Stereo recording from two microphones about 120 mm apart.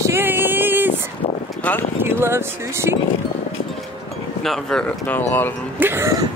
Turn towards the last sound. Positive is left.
turn(degrees=-20)  # may be behind; listen again after turning